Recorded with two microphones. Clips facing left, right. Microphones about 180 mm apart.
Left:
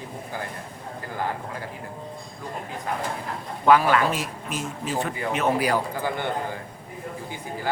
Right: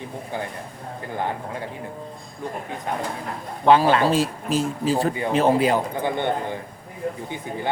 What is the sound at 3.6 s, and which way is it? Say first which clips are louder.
A man's voice: right 2 dB; 25° right (ahead or behind).